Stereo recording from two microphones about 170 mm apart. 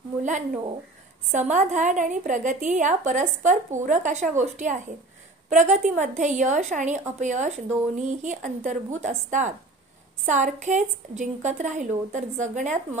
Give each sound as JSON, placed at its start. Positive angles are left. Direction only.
{"t": 0.2, "sound": "a woman's voice", "side_deg": -45}